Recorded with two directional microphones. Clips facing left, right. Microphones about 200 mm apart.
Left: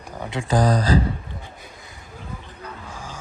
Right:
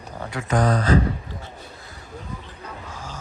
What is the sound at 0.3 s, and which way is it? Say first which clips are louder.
Speech: left 1 dB; 30° left (ahead or behind).